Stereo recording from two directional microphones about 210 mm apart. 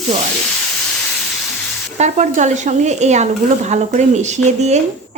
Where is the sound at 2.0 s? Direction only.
35° right (ahead or behind).